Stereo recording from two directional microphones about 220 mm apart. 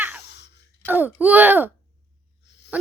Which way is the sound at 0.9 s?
10° right (ahead or behind).